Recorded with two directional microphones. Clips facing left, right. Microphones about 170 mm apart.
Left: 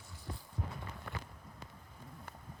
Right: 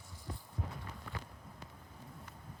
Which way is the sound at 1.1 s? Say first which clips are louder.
Left 1 dB; 60° left (ahead or behind).